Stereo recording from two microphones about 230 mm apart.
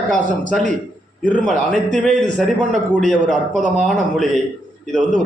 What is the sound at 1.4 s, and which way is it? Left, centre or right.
A man's voice, centre.